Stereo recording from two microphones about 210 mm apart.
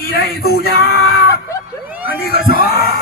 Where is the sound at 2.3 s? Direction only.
50° left (ahead or behind).